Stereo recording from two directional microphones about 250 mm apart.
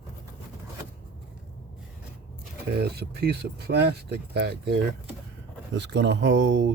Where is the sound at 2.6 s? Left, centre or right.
Right.